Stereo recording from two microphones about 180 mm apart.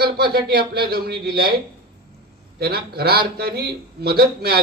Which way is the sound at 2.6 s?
60° right (ahead or behind).